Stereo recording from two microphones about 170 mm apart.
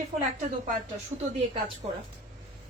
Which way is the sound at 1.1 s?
35° right (ahead or behind).